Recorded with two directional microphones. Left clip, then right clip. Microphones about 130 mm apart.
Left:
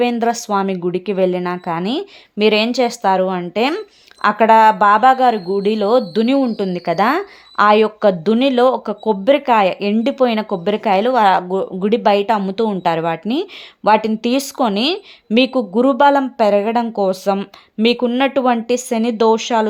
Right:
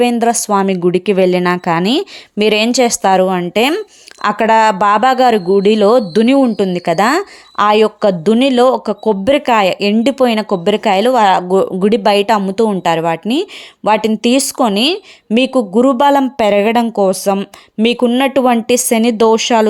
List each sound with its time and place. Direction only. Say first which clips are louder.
0.0 s a woman's voice: right 4 dB; 25° right (ahead or behind)
11.4 s a woman's voice: right 7 dB; 40° right (ahead or behind)
11.9 s a woman's voice: right 1 dB; 30° right (ahead or behind)